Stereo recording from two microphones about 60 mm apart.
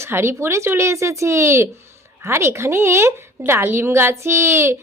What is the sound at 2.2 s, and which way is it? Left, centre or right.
A woman's voice, right.